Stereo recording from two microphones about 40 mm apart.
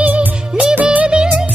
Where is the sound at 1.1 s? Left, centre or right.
Right.